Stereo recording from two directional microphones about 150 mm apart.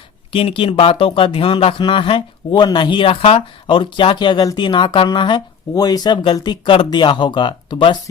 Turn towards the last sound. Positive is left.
turn(degrees=30)  # may be behind; listen again after turning